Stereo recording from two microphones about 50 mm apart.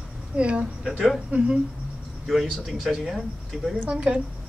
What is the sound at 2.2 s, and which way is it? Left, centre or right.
Speech, centre.